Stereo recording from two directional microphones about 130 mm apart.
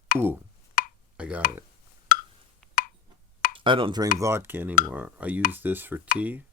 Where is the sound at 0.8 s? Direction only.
90° left.